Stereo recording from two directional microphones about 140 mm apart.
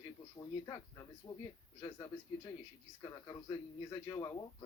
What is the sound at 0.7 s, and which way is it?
Speech, 25° left (ahead or behind).